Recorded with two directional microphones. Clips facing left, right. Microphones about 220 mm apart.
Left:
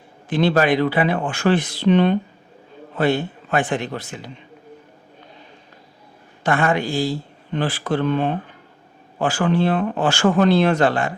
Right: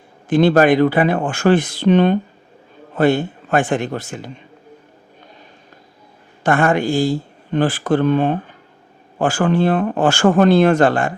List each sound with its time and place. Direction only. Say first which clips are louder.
0.3 s speech: right 5 dB; 50° right (ahead or behind)
6.4 s speech: right 4 dB; 50° right (ahead or behind)